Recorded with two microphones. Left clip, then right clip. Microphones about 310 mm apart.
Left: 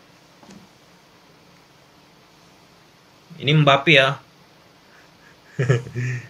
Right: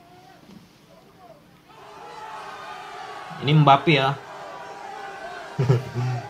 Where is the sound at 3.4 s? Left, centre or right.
Centre.